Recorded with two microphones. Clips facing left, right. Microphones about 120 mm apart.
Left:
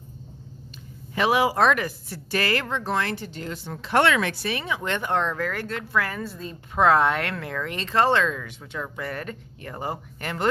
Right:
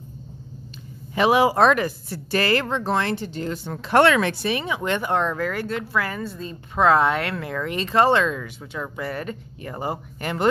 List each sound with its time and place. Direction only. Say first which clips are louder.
1.1 s a woman's voice: right 4 dB; 25° right (ahead or behind); by 4.3 s 40° right (ahead or behind)
4.3 s speech: right 4 dB; 20° right (ahead or behind)